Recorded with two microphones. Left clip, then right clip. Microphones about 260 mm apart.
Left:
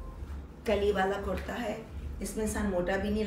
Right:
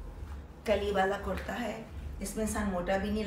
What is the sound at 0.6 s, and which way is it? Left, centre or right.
A woman's voice, centre.